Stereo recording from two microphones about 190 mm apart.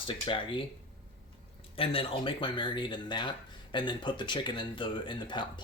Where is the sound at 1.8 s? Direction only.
30° left (ahead or behind).